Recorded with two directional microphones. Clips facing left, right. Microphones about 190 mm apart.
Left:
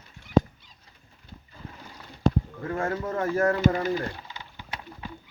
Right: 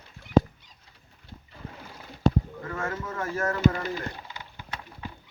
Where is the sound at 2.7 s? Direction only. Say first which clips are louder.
Left 5 dB; 35° left (ahead or behind).